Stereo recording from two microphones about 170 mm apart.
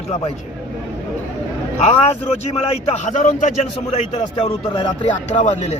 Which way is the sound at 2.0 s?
35° left (ahead or behind).